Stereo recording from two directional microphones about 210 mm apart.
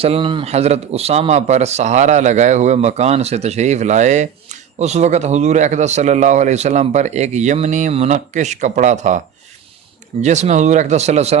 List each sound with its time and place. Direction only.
0.0 s speech: 25° right (ahead or behind)